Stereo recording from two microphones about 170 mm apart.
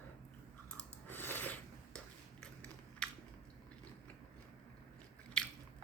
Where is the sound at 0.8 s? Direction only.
10° left (ahead or behind).